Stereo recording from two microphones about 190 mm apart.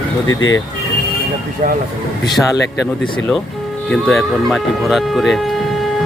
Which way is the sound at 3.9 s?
Centre (ahead or behind).